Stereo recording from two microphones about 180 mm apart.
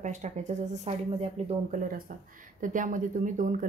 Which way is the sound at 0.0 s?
40° right (ahead or behind).